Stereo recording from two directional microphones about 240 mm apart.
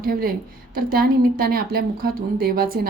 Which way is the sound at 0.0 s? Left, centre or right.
Right.